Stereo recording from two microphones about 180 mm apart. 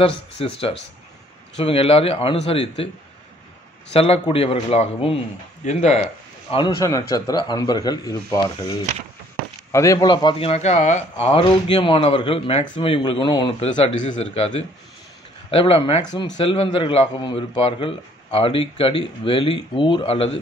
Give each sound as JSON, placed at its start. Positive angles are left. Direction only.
{"t": 0.0, "sound": "a man's voice", "side_deg": 30}
{"t": 3.9, "sound": "a man's voice", "side_deg": 30}
{"t": 6.5, "sound": "a man's voice", "side_deg": 20}
{"t": 13.7, "sound": "a man's voice", "side_deg": 40}
{"t": 15.5, "sound": "a man's voice", "side_deg": 30}